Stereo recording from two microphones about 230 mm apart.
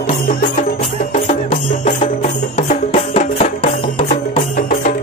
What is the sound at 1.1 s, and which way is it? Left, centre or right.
Music, left.